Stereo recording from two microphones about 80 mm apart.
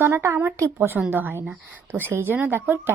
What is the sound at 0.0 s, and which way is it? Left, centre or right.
A woman's voice, right.